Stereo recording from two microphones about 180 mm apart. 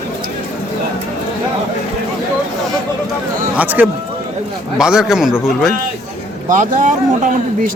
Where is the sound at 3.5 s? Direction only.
10° right (ahead or behind).